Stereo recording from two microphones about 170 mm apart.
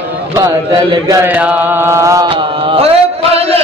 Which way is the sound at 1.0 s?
15° right (ahead or behind).